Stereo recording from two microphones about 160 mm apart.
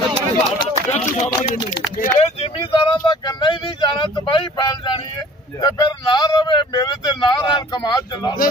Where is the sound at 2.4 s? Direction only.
30° left (ahead or behind).